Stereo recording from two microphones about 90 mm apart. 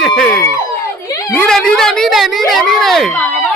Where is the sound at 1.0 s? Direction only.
40° left (ahead or behind).